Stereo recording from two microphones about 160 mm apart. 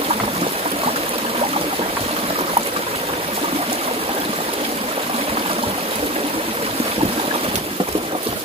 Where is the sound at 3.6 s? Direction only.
40° right (ahead or behind).